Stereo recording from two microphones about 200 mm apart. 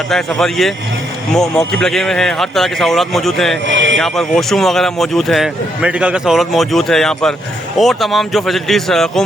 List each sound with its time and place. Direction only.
0.1 s a man's voice: centre (ahead or behind)
3.7 s a man's voice: 65° right (ahead or behind)
4.0 s a man's voice: centre (ahead or behind)